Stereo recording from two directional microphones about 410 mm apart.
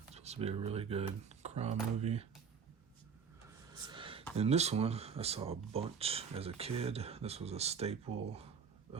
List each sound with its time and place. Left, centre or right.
0.1 s speech: centre
3.7 s speech: centre